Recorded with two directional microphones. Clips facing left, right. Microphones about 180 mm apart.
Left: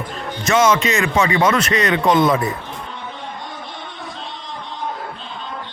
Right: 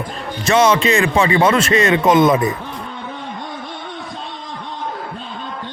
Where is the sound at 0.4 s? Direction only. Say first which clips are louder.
Right 2 dB; 35° right (ahead or behind).